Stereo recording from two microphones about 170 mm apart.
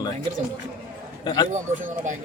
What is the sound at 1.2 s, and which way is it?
Speech, 25° left (ahead or behind).